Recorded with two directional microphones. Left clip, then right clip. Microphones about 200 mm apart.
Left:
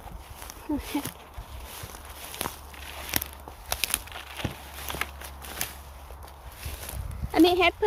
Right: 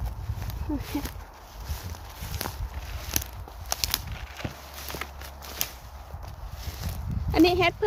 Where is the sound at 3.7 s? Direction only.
15° left (ahead or behind).